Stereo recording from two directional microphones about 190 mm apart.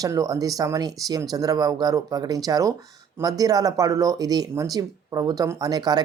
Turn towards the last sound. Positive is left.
turn(degrees=-20)  # may be behind; listen again after turning